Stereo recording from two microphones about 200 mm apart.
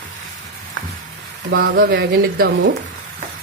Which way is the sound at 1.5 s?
50° right (ahead or behind).